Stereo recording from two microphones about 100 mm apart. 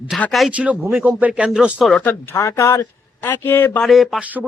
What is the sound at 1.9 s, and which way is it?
Speech, 10° left (ahead or behind).